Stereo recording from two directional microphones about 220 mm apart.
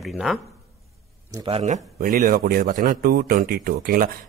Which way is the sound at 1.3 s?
25° right (ahead or behind).